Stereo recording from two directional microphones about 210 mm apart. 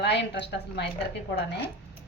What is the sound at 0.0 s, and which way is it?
Speech, 55° left (ahead or behind).